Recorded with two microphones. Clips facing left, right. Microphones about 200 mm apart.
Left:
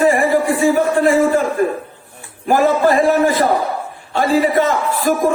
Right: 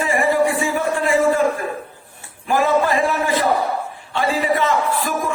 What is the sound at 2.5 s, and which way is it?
A man's voice, 45° left (ahead or behind).